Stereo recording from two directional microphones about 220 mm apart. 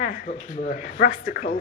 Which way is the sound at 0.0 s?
40° left (ahead or behind).